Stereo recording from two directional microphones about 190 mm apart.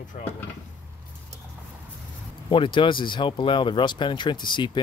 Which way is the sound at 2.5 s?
25° left (ahead or behind).